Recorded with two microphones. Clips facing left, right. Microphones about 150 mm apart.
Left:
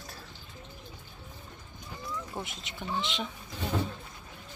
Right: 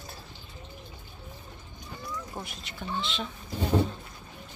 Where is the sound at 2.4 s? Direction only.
20° left (ahead or behind).